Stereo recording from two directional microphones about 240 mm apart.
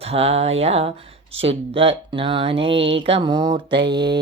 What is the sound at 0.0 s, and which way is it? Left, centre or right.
Mantra, right.